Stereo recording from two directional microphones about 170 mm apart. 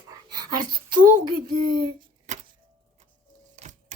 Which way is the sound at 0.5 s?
55° right (ahead or behind).